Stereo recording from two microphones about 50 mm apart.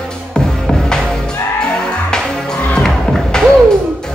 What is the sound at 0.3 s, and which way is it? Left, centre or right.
Music, centre.